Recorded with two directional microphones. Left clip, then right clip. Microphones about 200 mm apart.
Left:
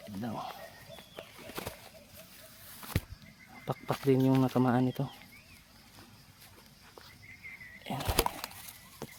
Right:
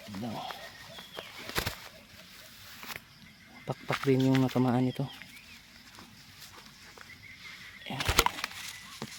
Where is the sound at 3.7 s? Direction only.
Centre (ahead or behind).